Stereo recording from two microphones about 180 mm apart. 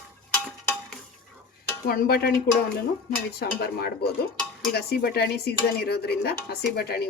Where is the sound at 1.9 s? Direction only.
55° left (ahead or behind).